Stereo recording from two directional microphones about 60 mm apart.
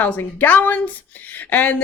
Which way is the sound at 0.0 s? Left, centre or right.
Left.